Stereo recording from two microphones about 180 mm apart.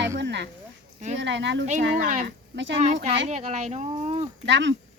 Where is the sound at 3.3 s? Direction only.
40° right (ahead or behind).